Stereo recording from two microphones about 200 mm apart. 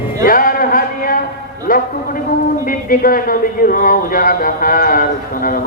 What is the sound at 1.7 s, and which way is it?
A man's voice, 45° left (ahead or behind).